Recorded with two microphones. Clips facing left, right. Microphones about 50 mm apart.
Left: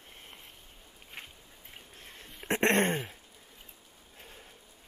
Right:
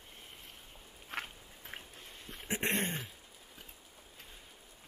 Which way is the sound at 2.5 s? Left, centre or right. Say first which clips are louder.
Left 8 dB; left.